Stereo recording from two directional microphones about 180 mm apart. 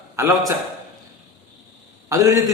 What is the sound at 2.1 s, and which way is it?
Speech, 20° right (ahead or behind).